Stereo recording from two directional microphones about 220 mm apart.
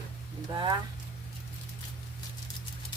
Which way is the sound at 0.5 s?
20° right (ahead or behind).